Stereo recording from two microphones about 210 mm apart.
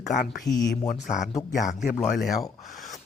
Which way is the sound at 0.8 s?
35° left (ahead or behind).